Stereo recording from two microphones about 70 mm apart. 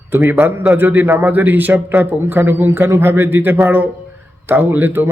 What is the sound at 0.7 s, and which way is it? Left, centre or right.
Speech, right.